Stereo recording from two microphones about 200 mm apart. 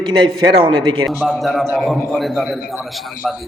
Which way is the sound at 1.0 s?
Centre (ahead or behind).